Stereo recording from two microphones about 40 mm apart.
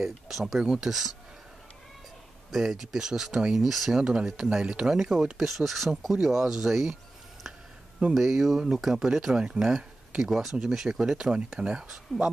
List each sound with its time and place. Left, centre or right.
0.0 s speech: centre
0.8 s speech: centre
2.5 s speech: centre
3.6 s speech: centre
3.9 s speech: centre
8.1 s speech: centre
8.5 s speech: centre